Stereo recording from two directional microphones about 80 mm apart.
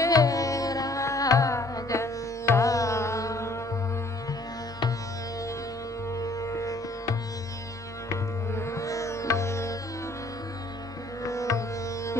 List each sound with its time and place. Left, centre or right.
0.0 s carnatic music: left
4.3 s music: left
6.1 s music: left
8.1 s sitar: left
11.2 s music: left